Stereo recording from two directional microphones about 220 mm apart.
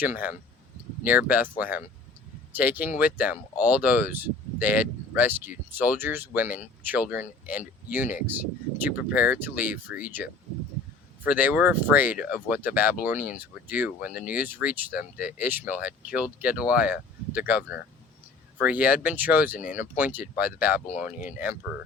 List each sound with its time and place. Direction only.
0.0 s speech: 10° right (ahead or behind)
19.0 s speech: 10° right (ahead or behind)